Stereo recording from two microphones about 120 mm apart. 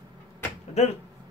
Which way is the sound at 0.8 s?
65° left (ahead or behind).